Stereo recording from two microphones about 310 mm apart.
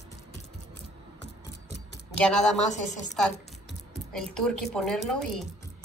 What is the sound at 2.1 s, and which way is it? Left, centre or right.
A woman's voice, centre.